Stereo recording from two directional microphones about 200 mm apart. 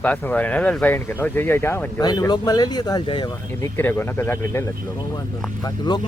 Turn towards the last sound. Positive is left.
turn(degrees=20)  # may be behind; listen again after turning